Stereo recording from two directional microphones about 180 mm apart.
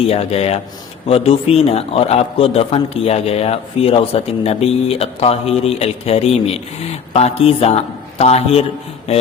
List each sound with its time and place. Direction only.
0.1 s a man's voice: 35° left (ahead or behind)
9.1 s mantra: 35° left (ahead or behind)